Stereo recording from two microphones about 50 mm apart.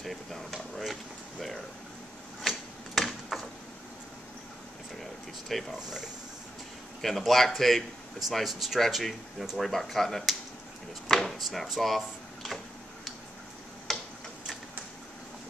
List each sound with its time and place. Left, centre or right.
0.0 s a sound: centre
2.4 s a sound: centre
5.5 s speech: centre
5.8 s speech: centre
7.0 s speech: centre
11.1 s drawer open or close: centre
13.9 s tick-tock: centre